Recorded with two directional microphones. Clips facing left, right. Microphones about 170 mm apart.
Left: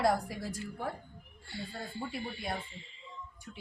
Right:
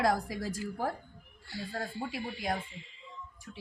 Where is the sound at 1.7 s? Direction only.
90° right.